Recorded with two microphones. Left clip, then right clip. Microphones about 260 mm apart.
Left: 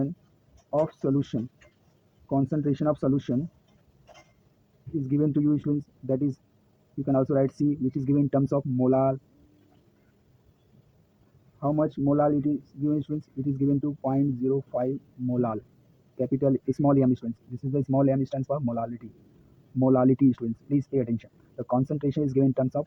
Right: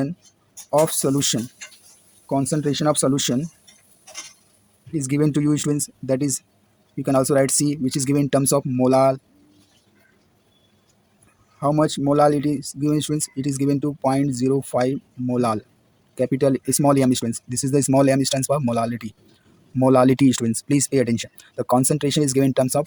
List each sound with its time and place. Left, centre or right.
0.7 s speech: right
5.0 s speech: right
7.5 s speech: right
11.6 s speech: right